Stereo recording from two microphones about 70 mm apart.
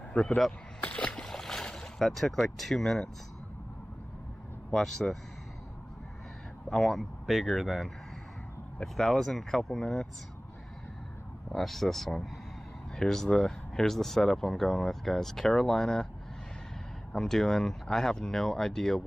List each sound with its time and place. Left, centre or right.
0.2 s speech: centre
0.5 s boat: centre
2.3 s speech: centre
4.7 s speech: centre
6.7 s speech: centre
11.5 s speech: centre
17.1 s speech: centre